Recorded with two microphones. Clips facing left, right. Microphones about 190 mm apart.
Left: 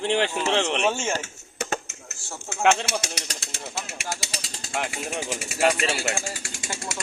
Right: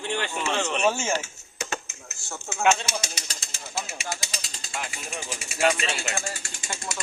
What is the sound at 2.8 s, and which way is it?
Speech, 75° left (ahead or behind).